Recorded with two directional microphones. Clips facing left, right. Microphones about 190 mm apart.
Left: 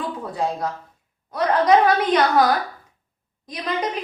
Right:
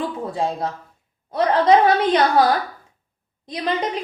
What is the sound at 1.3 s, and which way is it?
A woman's voice, 25° right (ahead or behind).